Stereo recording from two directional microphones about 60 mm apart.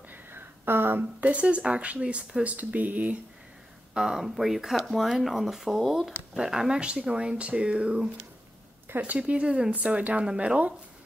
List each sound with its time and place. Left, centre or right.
0.1 s a sound: right
1.2 s speech: right
3.9 s speech: centre
8.9 s speech: right
9.2 s speech: centre